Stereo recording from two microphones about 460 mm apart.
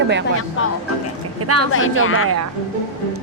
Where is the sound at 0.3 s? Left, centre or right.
Left.